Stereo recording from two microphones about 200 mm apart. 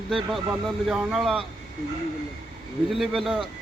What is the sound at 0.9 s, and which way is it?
Speech, centre (ahead or behind).